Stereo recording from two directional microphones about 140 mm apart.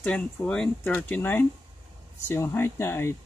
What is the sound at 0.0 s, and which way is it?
Speech, 10° left (ahead or behind).